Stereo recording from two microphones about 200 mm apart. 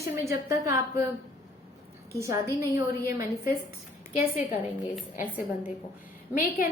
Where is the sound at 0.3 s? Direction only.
15° right (ahead or behind).